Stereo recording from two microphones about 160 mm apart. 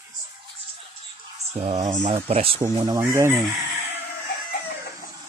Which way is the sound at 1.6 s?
35° right (ahead or behind).